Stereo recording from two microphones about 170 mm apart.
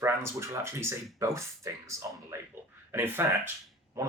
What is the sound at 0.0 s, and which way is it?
A man's voice, 15° right (ahead or behind).